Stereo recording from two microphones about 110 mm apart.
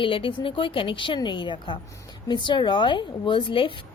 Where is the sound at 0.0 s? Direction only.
55° left (ahead or behind).